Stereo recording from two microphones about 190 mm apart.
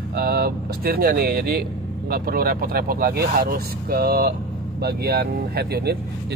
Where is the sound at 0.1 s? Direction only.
55° right (ahead or behind).